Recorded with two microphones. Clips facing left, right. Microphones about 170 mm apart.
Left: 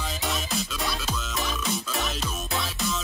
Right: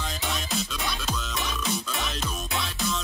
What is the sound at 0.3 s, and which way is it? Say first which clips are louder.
Music: even; centre (ahead or behind).